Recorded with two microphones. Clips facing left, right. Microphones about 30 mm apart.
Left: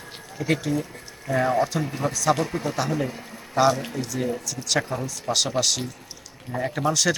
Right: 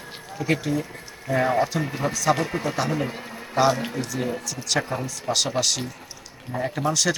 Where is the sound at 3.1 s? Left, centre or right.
Right.